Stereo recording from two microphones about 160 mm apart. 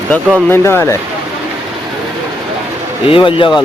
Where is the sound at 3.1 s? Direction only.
35° left (ahead or behind).